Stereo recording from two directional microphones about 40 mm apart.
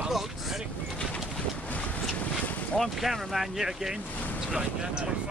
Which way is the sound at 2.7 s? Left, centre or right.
Centre.